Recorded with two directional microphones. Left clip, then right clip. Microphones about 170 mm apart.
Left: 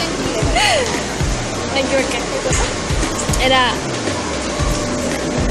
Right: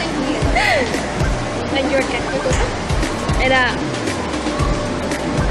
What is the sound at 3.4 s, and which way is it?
Speech, 15° left (ahead or behind).